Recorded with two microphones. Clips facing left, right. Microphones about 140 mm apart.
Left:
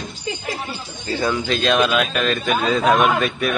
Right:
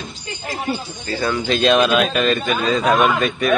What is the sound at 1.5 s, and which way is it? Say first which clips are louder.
Speech: right 5 dB; centre (ahead or behind).